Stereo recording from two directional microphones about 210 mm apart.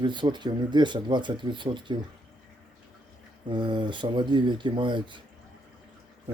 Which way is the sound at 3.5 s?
20° right (ahead or behind).